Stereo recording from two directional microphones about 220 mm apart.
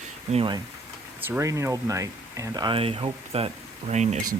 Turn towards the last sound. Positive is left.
turn(degrees=-30)  # may be behind; listen again after turning